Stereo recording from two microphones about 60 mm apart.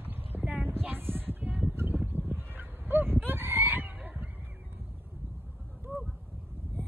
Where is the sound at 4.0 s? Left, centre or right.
Right.